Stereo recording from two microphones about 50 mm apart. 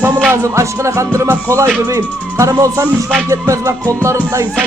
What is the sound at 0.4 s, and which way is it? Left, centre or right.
Music, right.